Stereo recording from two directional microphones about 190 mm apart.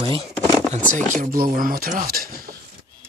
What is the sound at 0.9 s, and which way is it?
Speech, 45° right (ahead or behind).